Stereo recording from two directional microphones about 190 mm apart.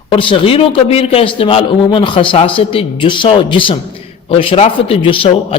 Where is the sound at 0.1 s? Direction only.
30° left (ahead or behind).